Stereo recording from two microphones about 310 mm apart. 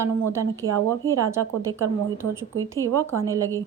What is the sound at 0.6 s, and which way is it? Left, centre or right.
Speech, right.